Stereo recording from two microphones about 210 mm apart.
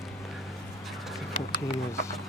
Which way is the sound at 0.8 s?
Centre (ahead or behind).